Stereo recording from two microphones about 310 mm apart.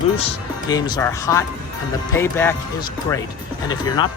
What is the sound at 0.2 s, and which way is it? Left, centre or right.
Speech, centre.